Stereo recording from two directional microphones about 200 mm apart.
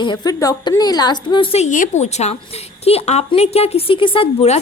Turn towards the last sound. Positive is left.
turn(degrees=30)  # may be behind; listen again after turning